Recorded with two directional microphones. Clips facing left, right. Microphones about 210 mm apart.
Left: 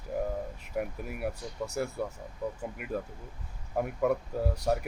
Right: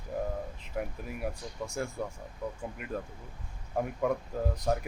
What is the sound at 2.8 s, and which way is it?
Speech, 5° left (ahead or behind).